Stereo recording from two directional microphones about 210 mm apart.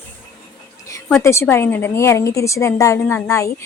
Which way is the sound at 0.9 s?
15° left (ahead or behind).